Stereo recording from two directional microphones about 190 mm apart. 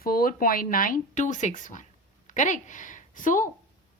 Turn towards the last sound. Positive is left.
turn(degrees=45)  # may be behind; listen again after turning